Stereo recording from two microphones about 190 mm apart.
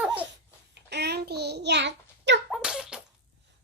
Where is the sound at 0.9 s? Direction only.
60° right (ahead or behind).